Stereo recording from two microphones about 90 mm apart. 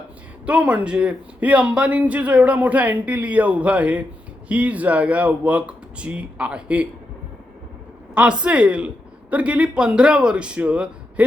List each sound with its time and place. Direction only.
0.4 s a man's voice: 15° right (ahead or behind)
8.1 s a man's voice: 10° right (ahead or behind)